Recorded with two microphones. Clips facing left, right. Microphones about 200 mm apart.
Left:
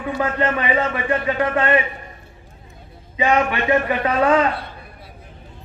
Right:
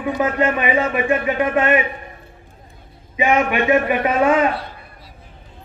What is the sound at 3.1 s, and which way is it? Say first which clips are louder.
A man's voice: right 1 dB; 20° right (ahead or behind).